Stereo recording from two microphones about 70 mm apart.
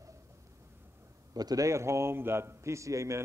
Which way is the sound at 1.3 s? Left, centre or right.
Right.